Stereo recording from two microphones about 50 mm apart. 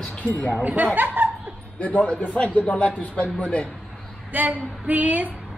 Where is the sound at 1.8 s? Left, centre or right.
Left.